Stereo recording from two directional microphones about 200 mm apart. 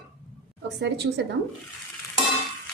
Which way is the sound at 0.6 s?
60° right (ahead or behind).